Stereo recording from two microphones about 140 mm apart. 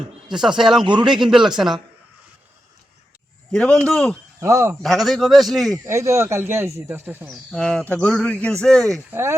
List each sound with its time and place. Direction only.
0.3 s a man's voice: 5° right (ahead or behind)
3.5 s a man's voice: 5° left (ahead or behind)
4.4 s speech: 20° right (ahead or behind)
4.8 s a man's voice: centre (ahead or behind)
5.7 s speech: 20° right (ahead or behind)
7.3 s speech: 5° left (ahead or behind)
9.0 s speech: 15° right (ahead or behind)